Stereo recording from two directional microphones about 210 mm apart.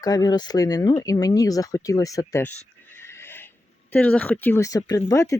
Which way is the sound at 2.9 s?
10° left (ahead or behind).